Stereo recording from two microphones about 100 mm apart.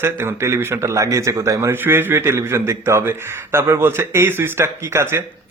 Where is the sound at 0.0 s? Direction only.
25° right (ahead or behind).